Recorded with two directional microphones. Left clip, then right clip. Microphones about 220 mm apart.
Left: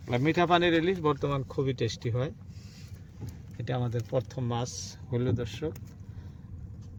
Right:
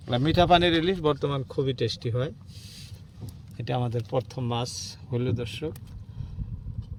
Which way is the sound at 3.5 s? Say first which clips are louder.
Right 4 dB; 20° right (ahead or behind).